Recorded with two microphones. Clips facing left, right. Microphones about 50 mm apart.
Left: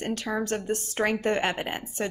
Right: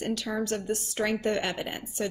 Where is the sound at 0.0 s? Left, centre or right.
Left.